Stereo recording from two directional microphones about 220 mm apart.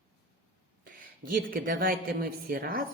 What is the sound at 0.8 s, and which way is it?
A woman's voice, 40° right (ahead or behind).